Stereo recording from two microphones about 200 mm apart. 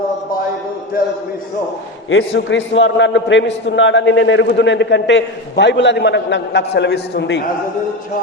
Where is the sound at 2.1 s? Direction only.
70° left (ahead or behind).